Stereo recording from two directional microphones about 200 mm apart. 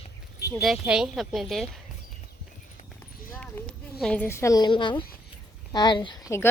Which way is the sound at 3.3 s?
10° left (ahead or behind).